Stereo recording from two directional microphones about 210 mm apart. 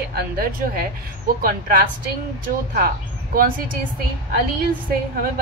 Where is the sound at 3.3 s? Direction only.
40° right (ahead or behind).